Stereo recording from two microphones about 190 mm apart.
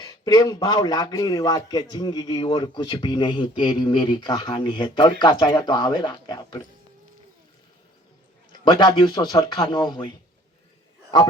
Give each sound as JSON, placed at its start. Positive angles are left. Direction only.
{"t": 0.0, "sound": "a man's voice", "side_deg": 20}
{"t": 8.6, "sound": "a man's voice", "side_deg": 25}